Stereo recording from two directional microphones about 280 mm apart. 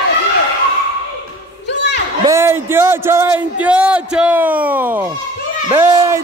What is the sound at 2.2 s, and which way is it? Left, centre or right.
Speech, centre.